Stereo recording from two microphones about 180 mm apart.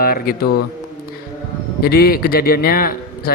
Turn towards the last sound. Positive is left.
turn(degrees=55)  # may be behind; listen again after turning